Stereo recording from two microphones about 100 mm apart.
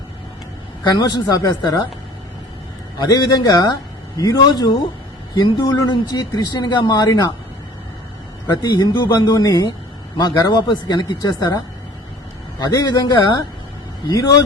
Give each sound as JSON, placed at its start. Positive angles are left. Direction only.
{"t": 0.9, "sound": "speech", "side_deg": 40}
{"t": 3.0, "sound": "speech", "side_deg": 40}
{"t": 8.6, "sound": "speech", "side_deg": 40}